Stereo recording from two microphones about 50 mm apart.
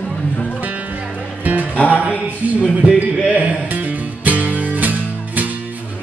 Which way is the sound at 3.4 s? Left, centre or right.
Right.